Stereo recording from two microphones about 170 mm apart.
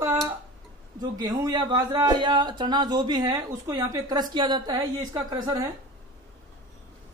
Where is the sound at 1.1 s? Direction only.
25° right (ahead or behind).